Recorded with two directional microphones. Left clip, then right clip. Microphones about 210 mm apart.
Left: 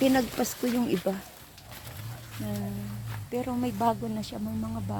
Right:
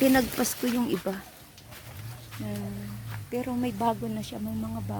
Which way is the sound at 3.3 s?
Centre (ahead or behind).